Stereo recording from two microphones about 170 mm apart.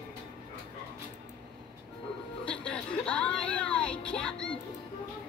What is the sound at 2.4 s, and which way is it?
Music, 5° left (ahead or behind).